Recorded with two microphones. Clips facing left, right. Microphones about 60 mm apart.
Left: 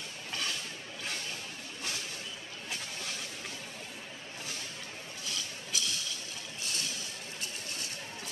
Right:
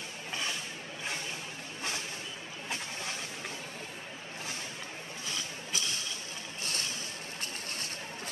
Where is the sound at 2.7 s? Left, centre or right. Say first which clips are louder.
Right 3 dB; right.